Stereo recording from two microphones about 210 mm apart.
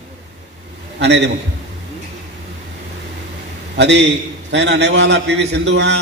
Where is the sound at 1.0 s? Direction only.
55° right (ahead or behind).